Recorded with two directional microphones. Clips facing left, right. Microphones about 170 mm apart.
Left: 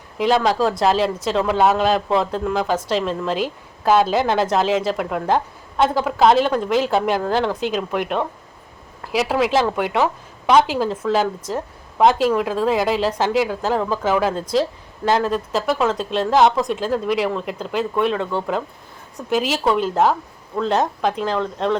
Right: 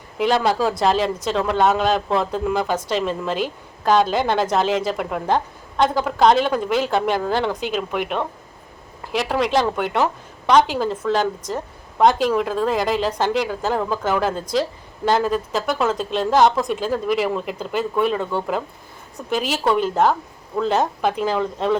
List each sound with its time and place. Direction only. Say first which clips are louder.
0.2 s a woman's voice: left 1 dB; centre (ahead or behind)